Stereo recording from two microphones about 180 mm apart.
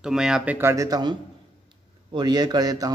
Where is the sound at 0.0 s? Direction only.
5° right (ahead or behind); by 1.1 s 20° right (ahead or behind).